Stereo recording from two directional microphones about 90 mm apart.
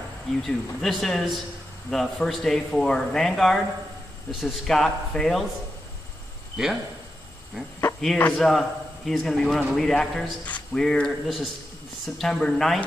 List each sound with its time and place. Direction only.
0.4 s a man's voice: centre (ahead or behind)
6.5 s speech: 5° right (ahead or behind)
8.2 s a man's voice: 10° left (ahead or behind)
10.4 s speech: 15° left (ahead or behind)
10.8 s a man's voice: 5° left (ahead or behind)